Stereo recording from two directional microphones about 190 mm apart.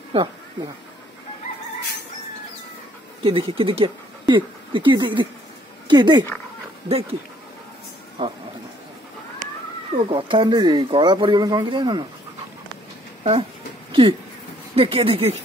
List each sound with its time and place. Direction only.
0.1 s speech: 25° right (ahead or behind)
3.2 s speech: 30° right (ahead or behind)
8.2 s speech: 30° right (ahead or behind)
9.9 s speech: 30° right (ahead or behind)
13.2 s speech: 30° right (ahead or behind)
14.8 s speech: 30° right (ahead or behind)